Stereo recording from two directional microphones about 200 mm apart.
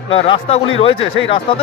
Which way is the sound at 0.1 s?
30° left (ahead or behind).